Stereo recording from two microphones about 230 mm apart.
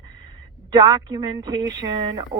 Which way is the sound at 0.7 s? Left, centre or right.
Centre.